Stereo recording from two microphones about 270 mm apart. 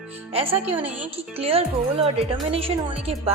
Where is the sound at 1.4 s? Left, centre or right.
Right.